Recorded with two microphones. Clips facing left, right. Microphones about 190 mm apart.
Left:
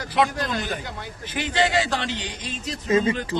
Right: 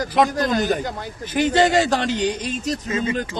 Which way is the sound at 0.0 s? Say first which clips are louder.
Right 4 dB; 40° right (ahead or behind).